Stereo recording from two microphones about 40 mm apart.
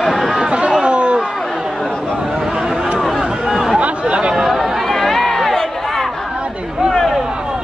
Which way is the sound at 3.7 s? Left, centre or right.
Right.